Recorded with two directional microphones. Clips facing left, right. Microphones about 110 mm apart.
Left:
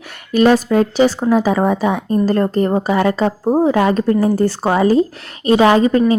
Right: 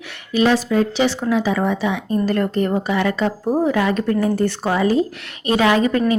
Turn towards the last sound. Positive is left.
turn(degrees=30)  # may be behind; listen again after turning